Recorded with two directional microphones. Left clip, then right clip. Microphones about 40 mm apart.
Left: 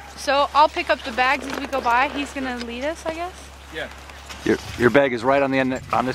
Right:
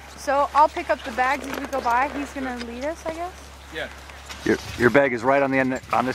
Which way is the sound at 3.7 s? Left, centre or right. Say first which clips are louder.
Left 1 dB; centre.